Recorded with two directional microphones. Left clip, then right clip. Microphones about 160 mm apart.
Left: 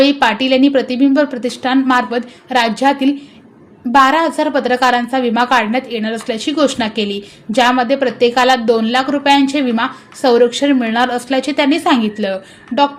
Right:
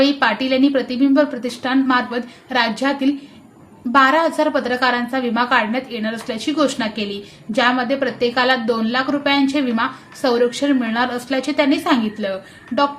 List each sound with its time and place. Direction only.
0.0 s a woman's voice: 30° left (ahead or behind)